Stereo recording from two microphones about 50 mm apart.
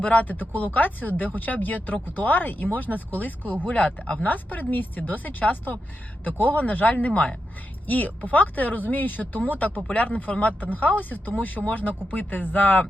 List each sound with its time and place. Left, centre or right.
0.0 s speech: left